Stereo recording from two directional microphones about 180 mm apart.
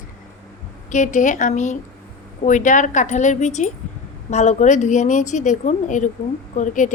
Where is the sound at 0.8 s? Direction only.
45° left (ahead or behind).